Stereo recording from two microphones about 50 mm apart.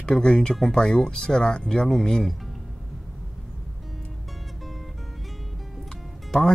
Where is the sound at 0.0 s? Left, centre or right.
Centre.